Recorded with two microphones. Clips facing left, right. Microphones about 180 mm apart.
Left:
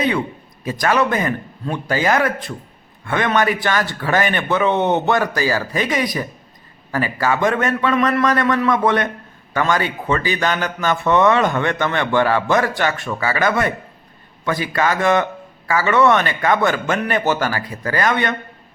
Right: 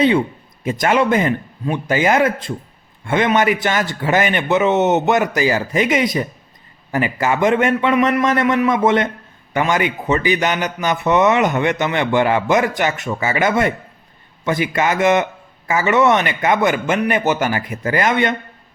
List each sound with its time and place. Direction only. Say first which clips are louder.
0.6 s a man's voice: right 2 dB; 25° right (ahead or behind)